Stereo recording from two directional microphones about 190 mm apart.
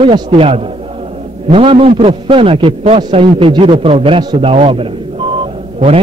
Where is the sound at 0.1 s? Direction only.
25° right (ahead or behind).